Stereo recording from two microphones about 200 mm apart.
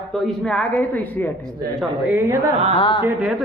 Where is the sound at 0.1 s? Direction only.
5° left (ahead or behind).